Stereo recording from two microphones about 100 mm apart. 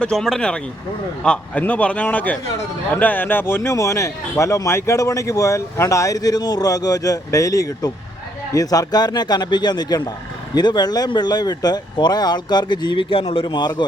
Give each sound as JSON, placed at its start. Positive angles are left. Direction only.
{"t": 0.0, "sound": "a man's voice", "side_deg": 5}